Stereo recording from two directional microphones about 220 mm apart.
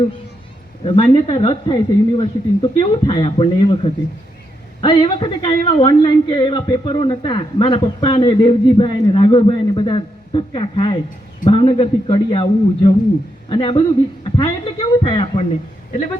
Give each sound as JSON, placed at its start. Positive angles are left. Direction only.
{"t": 1.1, "sound": "a man's voice", "side_deg": 25}